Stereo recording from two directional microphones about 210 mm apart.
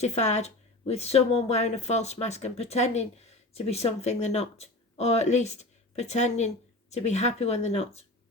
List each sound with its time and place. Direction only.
0.0 s a woman's voice: 30° left (ahead or behind)